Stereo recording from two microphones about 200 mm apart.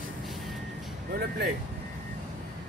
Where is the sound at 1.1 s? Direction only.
55° right (ahead or behind).